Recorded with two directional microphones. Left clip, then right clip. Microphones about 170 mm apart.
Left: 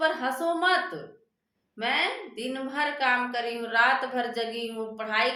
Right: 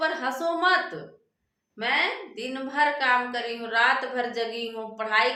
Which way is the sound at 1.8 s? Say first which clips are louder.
Right 2 dB; 10° left (ahead or behind).